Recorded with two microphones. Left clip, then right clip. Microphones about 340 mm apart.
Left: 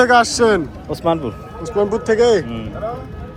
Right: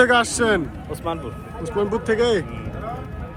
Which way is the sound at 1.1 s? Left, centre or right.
Left.